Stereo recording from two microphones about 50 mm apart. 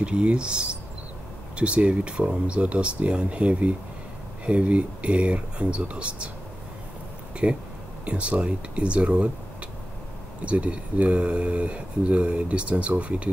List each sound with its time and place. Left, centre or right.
0.0 s speech: right
7.4 s speech: right
10.4 s speech: right